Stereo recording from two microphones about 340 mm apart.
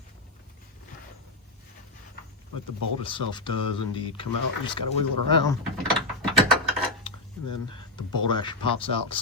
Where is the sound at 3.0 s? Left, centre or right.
Centre.